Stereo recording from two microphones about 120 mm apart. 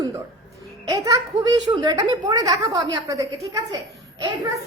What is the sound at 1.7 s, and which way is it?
Speech, 35° right (ahead or behind).